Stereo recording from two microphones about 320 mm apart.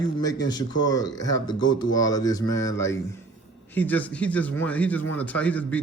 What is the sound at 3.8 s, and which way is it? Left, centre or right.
Speech, centre.